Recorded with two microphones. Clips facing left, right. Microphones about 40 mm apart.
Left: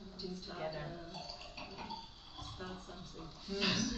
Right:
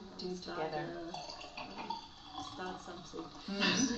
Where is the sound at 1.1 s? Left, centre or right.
Right.